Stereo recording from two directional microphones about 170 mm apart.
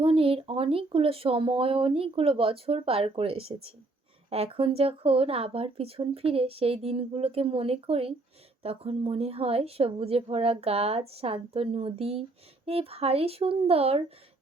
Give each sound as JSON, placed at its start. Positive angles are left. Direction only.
{"t": 0.0, "sound": "speech", "side_deg": -35}